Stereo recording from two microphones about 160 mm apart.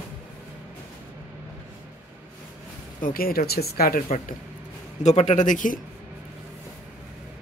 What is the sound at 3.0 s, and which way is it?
Speech, 65° left (ahead or behind).